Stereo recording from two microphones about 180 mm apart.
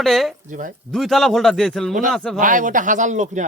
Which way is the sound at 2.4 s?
45° right (ahead or behind).